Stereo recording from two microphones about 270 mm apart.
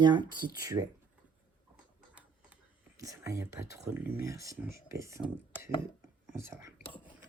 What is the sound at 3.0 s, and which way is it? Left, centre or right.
Speech, centre.